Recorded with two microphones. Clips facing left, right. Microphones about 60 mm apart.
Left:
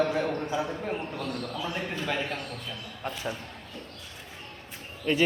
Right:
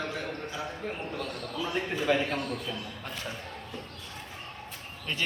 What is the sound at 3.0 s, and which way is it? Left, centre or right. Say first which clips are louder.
Speech: left 4 dB; centre.